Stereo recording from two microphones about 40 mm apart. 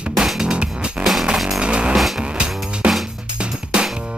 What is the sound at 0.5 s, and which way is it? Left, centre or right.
Music, right.